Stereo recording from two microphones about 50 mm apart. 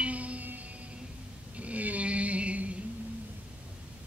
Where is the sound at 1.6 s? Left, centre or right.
Right.